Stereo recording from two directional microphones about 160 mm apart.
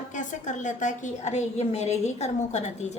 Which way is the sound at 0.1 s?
50° left (ahead or behind).